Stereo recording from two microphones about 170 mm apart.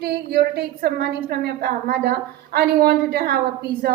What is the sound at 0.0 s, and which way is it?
A woman's voice, 65° right (ahead or behind).